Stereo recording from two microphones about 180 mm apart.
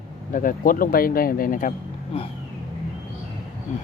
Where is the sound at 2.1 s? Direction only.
35° left (ahead or behind).